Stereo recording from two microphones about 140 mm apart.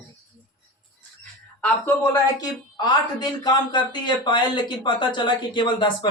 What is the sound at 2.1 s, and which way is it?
Speech, 30° left (ahead or behind).